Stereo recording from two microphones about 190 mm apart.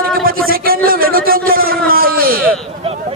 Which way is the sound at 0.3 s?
50° right (ahead or behind).